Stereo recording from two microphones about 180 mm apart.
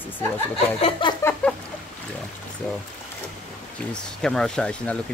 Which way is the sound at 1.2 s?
15° left (ahead or behind).